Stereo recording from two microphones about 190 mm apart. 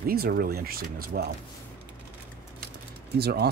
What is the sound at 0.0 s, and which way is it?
Speech, 55° right (ahead or behind).